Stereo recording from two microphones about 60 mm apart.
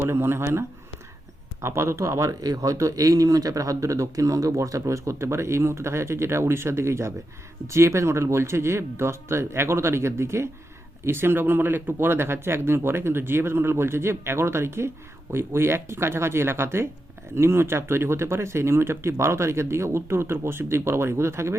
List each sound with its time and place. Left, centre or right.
0.0 s speech: right
1.6 s speech: right